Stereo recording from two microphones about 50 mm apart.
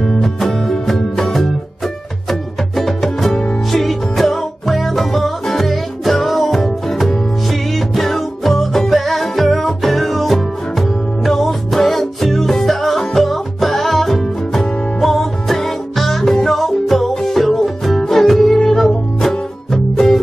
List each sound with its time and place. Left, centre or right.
0.0 s music: centre